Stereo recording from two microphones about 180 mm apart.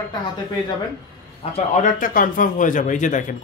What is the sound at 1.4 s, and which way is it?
Speech, 45° left (ahead or behind).